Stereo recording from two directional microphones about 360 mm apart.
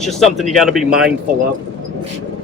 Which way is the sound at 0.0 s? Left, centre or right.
Centre.